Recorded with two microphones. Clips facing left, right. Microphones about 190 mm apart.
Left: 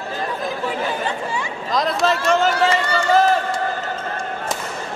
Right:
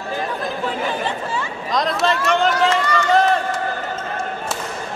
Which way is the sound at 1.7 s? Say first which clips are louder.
Left 1 dB; centre (ahead or behind).